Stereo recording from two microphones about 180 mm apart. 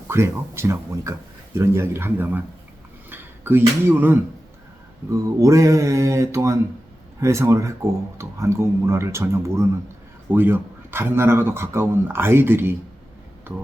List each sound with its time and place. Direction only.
0.1 s a man's voice: 15° right (ahead or behind)